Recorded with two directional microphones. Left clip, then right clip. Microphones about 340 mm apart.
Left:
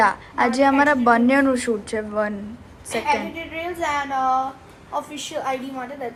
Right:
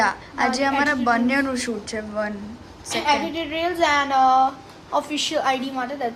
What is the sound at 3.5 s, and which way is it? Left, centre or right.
A woman's voice, right.